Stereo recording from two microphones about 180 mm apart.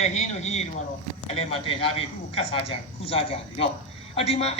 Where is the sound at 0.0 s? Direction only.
40° left (ahead or behind).